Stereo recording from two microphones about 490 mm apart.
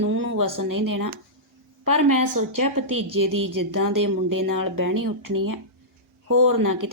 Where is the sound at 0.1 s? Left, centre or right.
Right.